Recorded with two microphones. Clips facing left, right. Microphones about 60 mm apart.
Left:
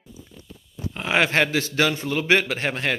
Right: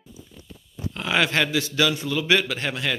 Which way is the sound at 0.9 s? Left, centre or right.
Left.